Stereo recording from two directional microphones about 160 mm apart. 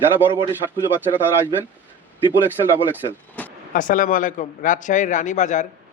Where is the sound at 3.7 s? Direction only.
55° left (ahead or behind).